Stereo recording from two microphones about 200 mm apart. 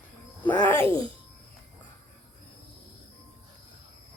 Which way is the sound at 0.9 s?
25° right (ahead or behind).